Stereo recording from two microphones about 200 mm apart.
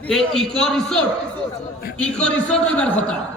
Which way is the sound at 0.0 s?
Centre (ahead or behind).